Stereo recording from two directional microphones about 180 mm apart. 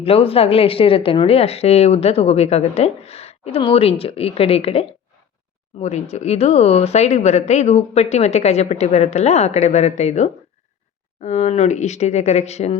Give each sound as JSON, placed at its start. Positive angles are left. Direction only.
{"t": 0.0, "sound": "a woman's voice", "side_deg": 30}